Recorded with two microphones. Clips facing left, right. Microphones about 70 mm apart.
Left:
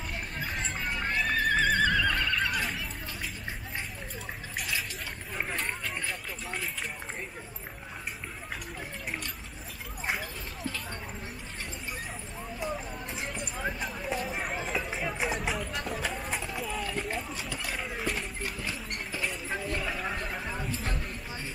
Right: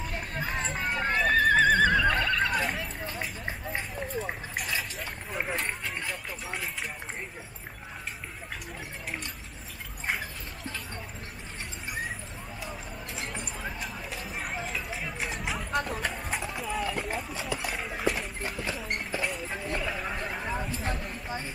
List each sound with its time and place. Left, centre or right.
0.3 s neigh: right
2.6 s a sound: right
5.3 s clip-clop: centre
13.4 s clip-clop: centre
14.1 s a sound: centre
14.9 s run: centre
15.3 s vehicle: centre
15.8 s run: centre
17.5 s clip-clop: centre
19.2 s vehicle: centre